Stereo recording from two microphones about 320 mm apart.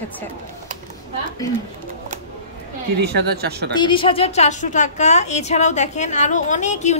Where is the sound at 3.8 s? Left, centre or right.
Centre.